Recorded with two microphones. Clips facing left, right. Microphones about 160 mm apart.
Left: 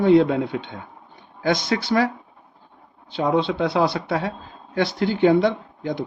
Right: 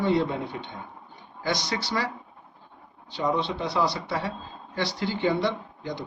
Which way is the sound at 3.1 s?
60° left (ahead or behind).